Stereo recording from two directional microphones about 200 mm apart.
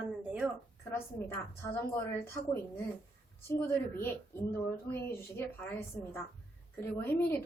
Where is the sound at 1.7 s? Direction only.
15° left (ahead or behind).